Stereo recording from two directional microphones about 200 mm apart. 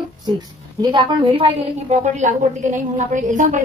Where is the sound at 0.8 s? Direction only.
25° right (ahead or behind).